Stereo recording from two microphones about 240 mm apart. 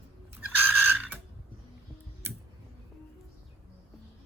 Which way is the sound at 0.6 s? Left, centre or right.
Centre.